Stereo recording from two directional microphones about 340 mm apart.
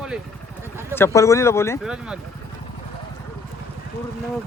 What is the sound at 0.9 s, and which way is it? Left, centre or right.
Speech, centre.